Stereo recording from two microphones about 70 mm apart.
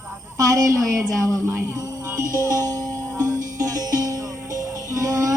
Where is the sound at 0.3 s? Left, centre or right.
Right.